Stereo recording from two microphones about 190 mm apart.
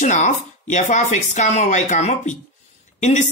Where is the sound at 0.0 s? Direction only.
40° left (ahead or behind).